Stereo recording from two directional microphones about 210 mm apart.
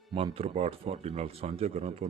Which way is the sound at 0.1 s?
25° right (ahead or behind).